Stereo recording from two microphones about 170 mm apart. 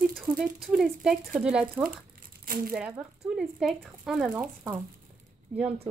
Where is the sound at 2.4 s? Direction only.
55° right (ahead or behind).